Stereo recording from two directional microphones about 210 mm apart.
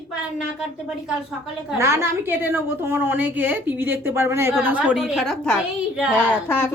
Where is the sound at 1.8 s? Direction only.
10° right (ahead or behind).